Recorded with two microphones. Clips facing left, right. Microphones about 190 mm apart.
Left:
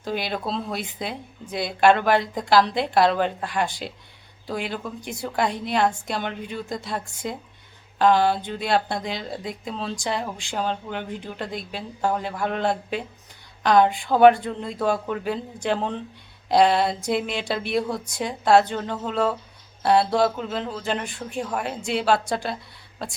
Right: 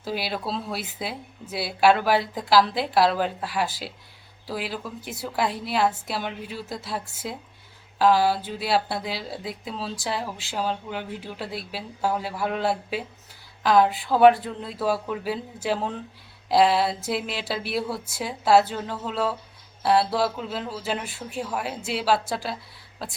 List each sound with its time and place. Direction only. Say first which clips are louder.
0.0 s speech: left 2 dB; 5° right (ahead or behind)